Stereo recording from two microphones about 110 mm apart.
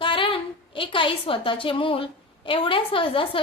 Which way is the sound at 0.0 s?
50° left (ahead or behind).